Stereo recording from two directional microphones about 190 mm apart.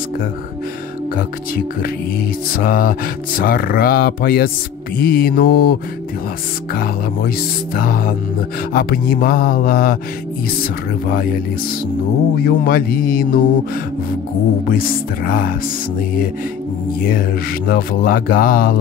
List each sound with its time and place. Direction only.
1.1 s speech: 50° left (ahead or behind)
12.4 s speech: 50° left (ahead or behind)
14.7 s speech: 50° left (ahead or behind)
17.0 s speech: 50° left (ahead or behind)